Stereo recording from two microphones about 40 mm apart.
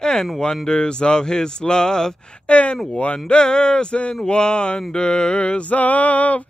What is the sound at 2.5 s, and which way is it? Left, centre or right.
Male singing, left.